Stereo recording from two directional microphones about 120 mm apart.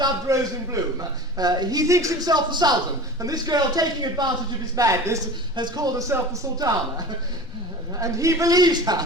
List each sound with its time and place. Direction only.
0.3 s a man's voice: 25° right (ahead or behind)
7.9 s a man's voice: 25° right (ahead or behind)